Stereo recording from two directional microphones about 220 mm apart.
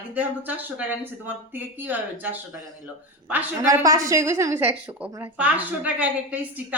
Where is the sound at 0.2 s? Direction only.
5° right (ahead or behind).